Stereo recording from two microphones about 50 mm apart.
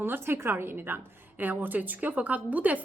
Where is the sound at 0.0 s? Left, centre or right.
Right.